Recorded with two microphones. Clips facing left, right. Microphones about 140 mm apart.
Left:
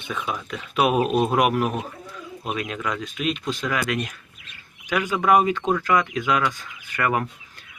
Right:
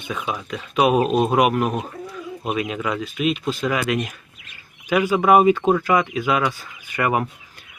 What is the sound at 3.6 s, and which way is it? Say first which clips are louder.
Speech: right 4 dB; 15° right (ahead or behind).